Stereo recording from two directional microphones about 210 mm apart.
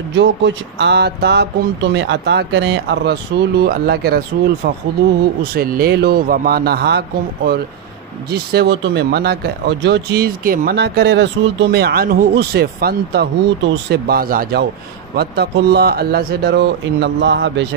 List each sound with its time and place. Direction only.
0.1 s speech: 60° right (ahead or behind)
5.4 s speech: 45° right (ahead or behind)